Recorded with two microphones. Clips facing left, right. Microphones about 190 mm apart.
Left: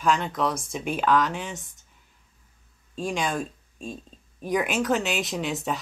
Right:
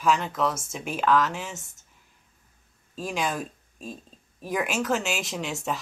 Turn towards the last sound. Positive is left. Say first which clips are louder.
# left 2 dB
turn(degrees=0)  # may be behind; listen again after turning